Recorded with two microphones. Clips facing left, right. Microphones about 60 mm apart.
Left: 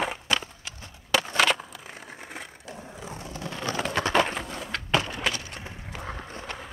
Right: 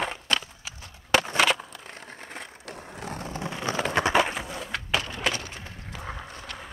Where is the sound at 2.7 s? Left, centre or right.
Right.